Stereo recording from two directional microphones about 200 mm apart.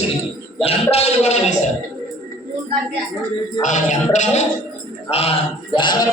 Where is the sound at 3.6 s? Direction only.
35° left (ahead or behind).